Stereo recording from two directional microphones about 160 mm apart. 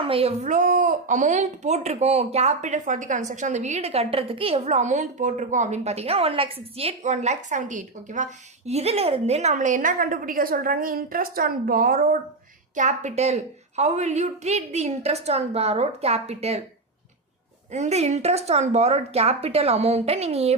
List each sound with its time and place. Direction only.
0.0 s speech: 35° right (ahead or behind)
17.7 s a woman's voice: 45° right (ahead or behind)